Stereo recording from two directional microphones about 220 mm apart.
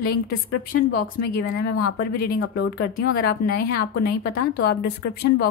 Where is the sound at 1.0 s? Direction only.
45° left (ahead or behind).